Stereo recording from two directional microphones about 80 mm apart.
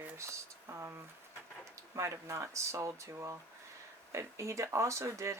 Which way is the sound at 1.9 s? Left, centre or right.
Right.